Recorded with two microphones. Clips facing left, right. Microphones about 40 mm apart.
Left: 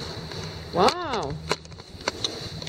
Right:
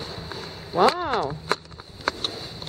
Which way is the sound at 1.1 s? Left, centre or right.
Centre.